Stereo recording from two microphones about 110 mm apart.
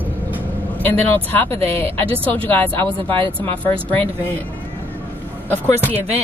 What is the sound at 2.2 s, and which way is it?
A woman's voice, 15° left (ahead or behind).